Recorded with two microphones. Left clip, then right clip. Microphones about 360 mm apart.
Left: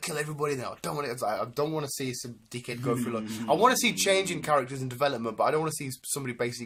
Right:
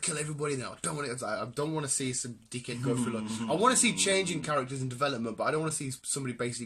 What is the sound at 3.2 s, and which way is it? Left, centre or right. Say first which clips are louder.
Speech: left 4 dB; centre.